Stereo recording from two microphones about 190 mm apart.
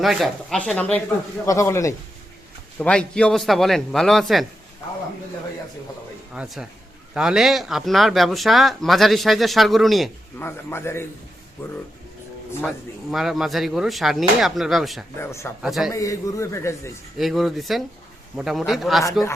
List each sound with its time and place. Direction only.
0.0 s a man's voice: centre (ahead or behind)
6.3 s speech: 5° right (ahead or behind)
10.4 s a man's voice: 10° left (ahead or behind)
12.6 s speech: centre (ahead or behind)
15.2 s a man's voice: 15° left (ahead or behind)
15.6 s speech: centre (ahead or behind)
15.9 s a man's voice: 15° left (ahead or behind)
17.2 s speech: centre (ahead or behind)